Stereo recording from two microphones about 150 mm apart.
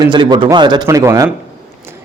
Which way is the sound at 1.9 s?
15° right (ahead or behind).